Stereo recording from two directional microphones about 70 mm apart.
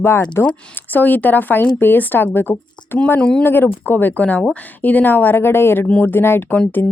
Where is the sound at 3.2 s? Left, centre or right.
Centre.